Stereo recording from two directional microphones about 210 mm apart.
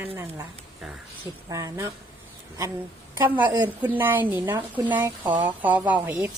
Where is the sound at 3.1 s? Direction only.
15° right (ahead or behind).